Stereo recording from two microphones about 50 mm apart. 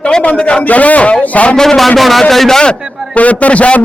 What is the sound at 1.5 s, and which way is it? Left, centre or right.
A man's voice, centre.